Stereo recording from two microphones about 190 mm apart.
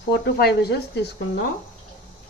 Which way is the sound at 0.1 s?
60° left (ahead or behind).